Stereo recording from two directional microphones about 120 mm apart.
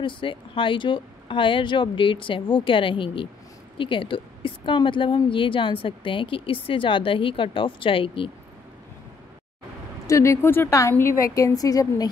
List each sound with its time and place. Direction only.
0.0 s a woman's voice: 45° left (ahead or behind)
10.0 s a woman's voice: 25° left (ahead or behind)